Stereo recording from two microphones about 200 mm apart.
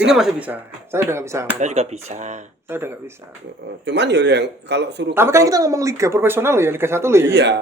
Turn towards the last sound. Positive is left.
turn(degrees=-60)  # may be behind; listen again after turning